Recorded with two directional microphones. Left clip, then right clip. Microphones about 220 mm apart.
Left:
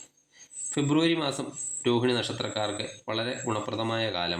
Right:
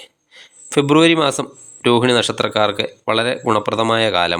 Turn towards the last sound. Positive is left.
turn(degrees=-35)  # may be behind; listen again after turning